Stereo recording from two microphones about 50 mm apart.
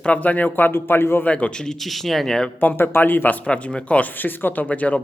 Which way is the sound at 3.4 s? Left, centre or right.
Left.